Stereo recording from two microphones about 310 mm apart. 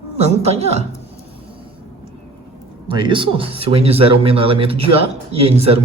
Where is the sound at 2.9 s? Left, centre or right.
Centre.